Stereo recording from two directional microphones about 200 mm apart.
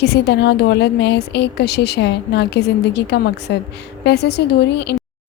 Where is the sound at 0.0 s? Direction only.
55° left (ahead or behind).